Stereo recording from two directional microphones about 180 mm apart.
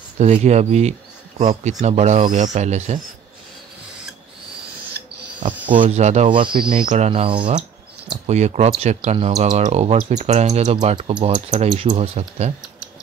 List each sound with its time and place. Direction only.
0.2 s speech: 40° right (ahead or behind)
5.7 s speech: 35° right (ahead or behind)